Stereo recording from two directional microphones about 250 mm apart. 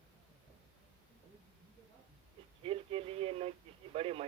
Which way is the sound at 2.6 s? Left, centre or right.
Right.